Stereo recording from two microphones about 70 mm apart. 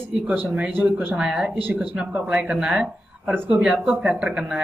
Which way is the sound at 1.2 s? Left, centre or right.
Centre.